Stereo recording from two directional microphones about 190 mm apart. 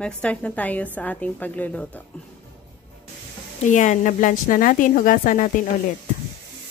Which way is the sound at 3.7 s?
40° left (ahead or behind).